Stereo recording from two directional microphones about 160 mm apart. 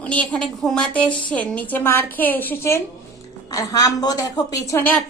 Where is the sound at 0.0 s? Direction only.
10° left (ahead or behind).